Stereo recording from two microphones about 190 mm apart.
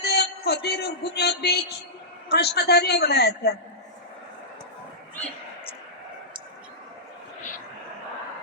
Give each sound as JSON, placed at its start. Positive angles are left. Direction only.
{"t": 0.0, "sound": "a sound", "side_deg": 60}
{"t": 1.1, "sound": "music", "side_deg": 60}
{"t": 2.3, "sound": "a man's voice", "side_deg": 60}